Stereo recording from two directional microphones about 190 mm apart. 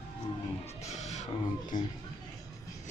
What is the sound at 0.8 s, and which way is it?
Music, 35° left (ahead or behind).